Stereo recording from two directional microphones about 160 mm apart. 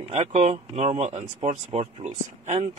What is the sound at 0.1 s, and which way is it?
Speech, 45° right (ahead or behind).